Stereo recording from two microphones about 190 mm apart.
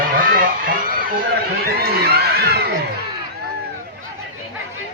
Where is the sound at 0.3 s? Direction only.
50° right (ahead or behind).